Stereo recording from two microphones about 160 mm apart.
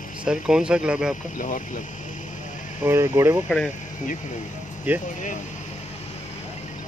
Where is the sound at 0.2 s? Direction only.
5° right (ahead or behind).